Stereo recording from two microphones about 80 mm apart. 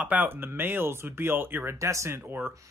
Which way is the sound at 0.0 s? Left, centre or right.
Right.